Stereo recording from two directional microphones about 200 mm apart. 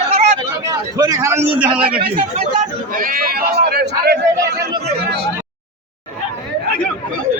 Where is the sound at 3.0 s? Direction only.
45° right (ahead or behind).